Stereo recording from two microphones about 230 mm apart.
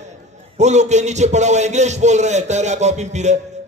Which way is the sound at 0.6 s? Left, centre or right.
Right.